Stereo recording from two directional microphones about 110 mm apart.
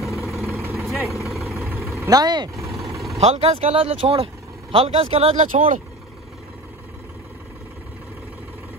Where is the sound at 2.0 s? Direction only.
35° right (ahead or behind).